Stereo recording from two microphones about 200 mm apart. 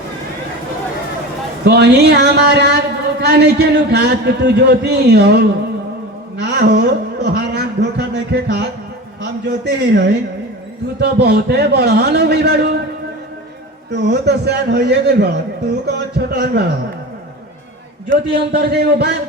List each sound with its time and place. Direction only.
1.6 s a man's voice: 55° right (ahead or behind)
13.9 s a man's voice: 55° right (ahead or behind)
18.5 s speech: 55° right (ahead or behind)